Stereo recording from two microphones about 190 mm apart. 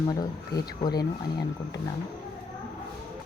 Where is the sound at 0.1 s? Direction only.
20° left (ahead or behind).